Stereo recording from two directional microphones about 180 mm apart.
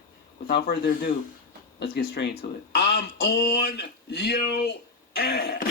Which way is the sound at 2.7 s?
60° left (ahead or behind).